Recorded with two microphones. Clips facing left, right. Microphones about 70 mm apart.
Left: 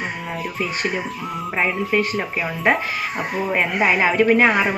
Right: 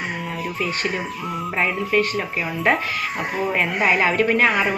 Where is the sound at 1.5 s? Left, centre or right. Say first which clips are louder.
Left 1 dB; centre.